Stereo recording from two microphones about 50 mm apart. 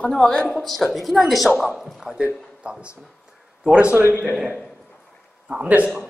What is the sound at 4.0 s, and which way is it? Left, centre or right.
Speech, right.